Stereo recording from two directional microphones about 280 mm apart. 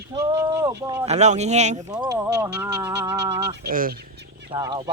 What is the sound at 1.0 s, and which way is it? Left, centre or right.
Speech, right.